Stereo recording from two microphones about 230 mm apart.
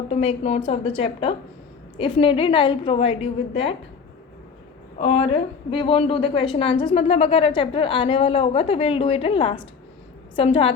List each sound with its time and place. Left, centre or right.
0.1 s a woman's voice: left
4.9 s a woman's voice: left